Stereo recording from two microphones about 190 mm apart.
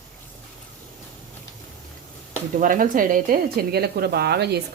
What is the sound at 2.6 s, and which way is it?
Speech, 45° right (ahead or behind).